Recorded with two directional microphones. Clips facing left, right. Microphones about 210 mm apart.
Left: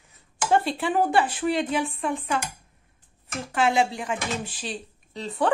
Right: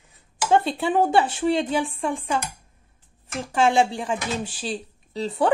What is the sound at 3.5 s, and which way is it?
Speech, 30° right (ahead or behind).